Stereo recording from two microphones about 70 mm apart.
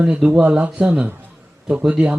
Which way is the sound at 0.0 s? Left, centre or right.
Centre.